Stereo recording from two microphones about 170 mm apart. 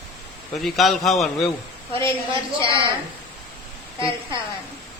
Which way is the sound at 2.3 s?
30° right (ahead or behind).